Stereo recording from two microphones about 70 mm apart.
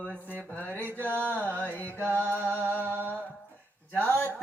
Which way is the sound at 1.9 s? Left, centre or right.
Right.